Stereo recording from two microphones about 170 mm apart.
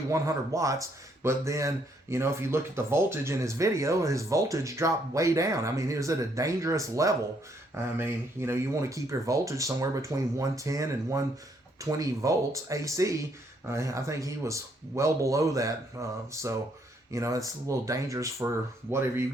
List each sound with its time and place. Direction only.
0.1 s speech: 20° right (ahead or behind)